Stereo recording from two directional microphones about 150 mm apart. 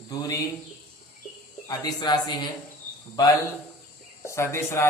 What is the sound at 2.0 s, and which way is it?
Speech, 30° left (ahead or behind).